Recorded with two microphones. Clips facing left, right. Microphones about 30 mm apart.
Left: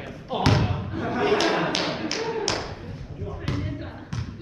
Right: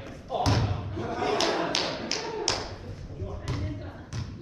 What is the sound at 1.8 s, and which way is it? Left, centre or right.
Tap, left.